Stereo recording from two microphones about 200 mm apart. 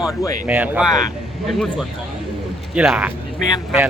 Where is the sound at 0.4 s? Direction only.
10° right (ahead or behind).